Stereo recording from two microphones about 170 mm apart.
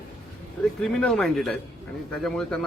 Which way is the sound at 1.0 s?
5° left (ahead or behind).